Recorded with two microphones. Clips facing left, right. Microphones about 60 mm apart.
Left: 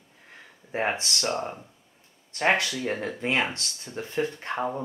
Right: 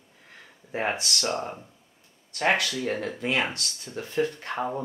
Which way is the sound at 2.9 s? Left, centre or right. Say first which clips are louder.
Right 1 dB; centre.